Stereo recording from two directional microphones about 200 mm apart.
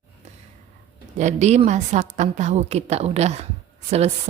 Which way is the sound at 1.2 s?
35° right (ahead or behind).